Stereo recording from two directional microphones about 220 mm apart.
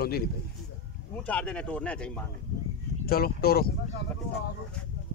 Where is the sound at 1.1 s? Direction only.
5° left (ahead or behind).